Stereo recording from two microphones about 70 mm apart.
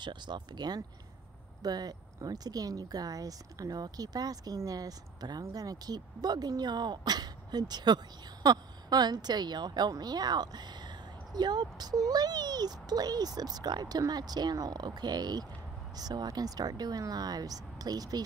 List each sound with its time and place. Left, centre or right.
0.0 s speech: right
1.6 s speech: right
16.0 s speech: right